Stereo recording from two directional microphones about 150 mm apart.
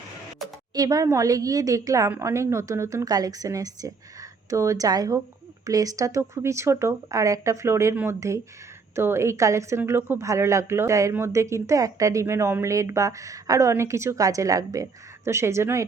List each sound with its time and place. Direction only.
0.7 s a woman's voice: 25° right (ahead or behind)